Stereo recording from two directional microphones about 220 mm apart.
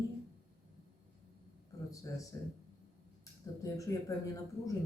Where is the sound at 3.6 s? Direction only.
15° left (ahead or behind).